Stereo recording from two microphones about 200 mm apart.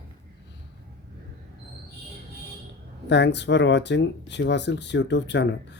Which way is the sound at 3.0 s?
60° left (ahead or behind).